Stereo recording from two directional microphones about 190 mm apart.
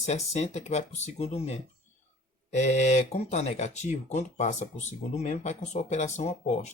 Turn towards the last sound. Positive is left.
turn(degrees=35)  # may be behind; listen again after turning